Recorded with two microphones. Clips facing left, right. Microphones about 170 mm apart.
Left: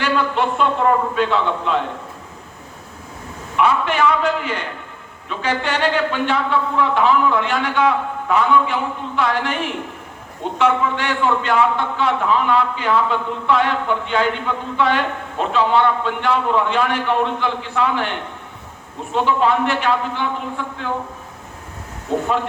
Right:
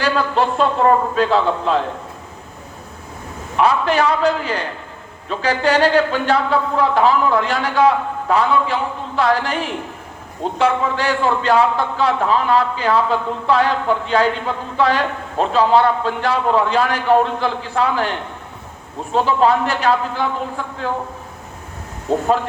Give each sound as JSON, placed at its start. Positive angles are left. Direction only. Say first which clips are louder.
{"t": 0.0, "sound": "a man's voice", "louder": "right 1 dB", "side_deg": -35}
{"t": 3.6, "sound": "a man's voice", "louder": "right 1 dB", "side_deg": -35}
{"t": 10.6, "sound": "a man's voice", "louder": "even", "side_deg": -35}
{"t": 19.1, "sound": "a man's voice", "louder": "right 2 dB", "side_deg": -40}
{"t": 22.1, "sound": "a man's voice", "louder": "right 2 dB", "side_deg": -35}